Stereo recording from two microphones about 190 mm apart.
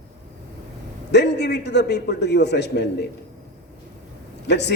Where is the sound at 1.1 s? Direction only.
65° left (ahead or behind).